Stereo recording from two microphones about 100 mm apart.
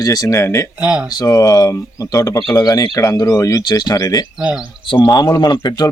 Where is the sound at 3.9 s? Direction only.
30° left (ahead or behind).